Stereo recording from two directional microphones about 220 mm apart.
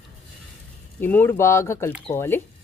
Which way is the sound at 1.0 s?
10° left (ahead or behind).